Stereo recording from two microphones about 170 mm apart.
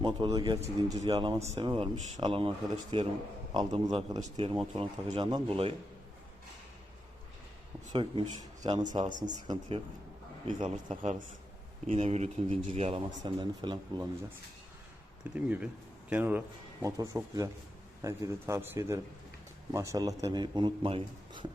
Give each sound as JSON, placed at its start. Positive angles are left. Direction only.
{"t": 0.0, "sound": "speech", "side_deg": -25}
{"t": 1.4, "sound": "speech", "side_deg": -40}
{"t": 1.6, "sound": "speech", "side_deg": -30}
{"t": 7.9, "sound": "speech", "side_deg": -30}
{"t": 10.4, "sound": "speech", "side_deg": -45}
{"t": 15.2, "sound": "a man's voice", "side_deg": -5}